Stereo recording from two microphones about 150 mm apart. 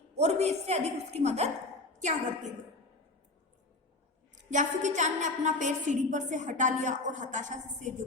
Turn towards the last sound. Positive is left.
turn(degrees=-55)  # may be behind; listen again after turning